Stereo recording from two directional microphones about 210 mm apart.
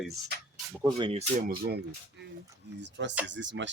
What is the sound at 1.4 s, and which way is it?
Speech, 45° right (ahead or behind).